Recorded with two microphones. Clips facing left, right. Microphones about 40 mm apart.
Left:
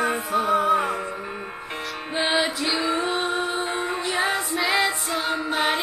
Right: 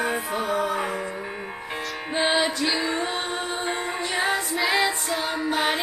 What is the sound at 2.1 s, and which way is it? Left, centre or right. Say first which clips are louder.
Music: even; centre.